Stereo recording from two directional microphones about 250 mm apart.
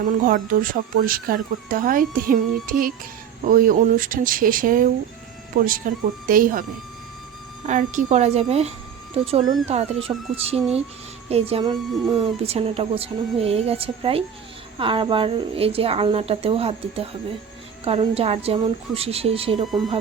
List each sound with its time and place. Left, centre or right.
0.2 s speech: right
7.7 s speech: right
19.6 s speech: centre